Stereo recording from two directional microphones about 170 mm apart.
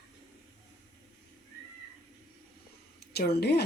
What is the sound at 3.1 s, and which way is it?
Speech, 70° left (ahead or behind).